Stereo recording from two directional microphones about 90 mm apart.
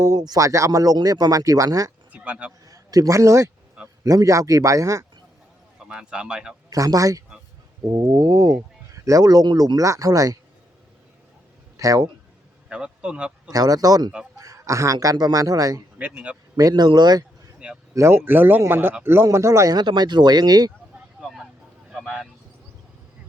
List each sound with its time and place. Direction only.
0.0 s a man's voice: 45° right (ahead or behind)
2.1 s a sound: 15° right (ahead or behind)
2.6 s a man's voice: 40° right (ahead or behind)
5.8 s speech: 10° right (ahead or behind)
6.7 s a man's voice: 40° right (ahead or behind)
11.8 s a man's voice: 40° right (ahead or behind)
12.6 s speech: 10° right (ahead or behind)
13.5 s speech: 45° right (ahead or behind)
14.3 s a sound: 40° right (ahead or behind)
14.9 s speech: 50° right (ahead or behind)
16.0 s speech: 15° right (ahead or behind)
16.6 s speech: 50° right (ahead or behind)
17.9 s speech: 30° right (ahead or behind); by 20.7 s 45° right (ahead or behind)
21.2 s vehicle: centre (ahead or behind)